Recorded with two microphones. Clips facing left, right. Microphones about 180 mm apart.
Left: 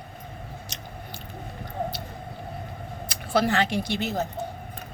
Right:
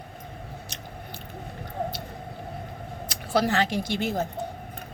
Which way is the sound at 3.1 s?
40° right (ahead or behind).